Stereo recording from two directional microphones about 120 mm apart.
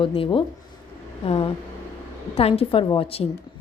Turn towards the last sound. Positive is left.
turn(degrees=50)  # may be behind; listen again after turning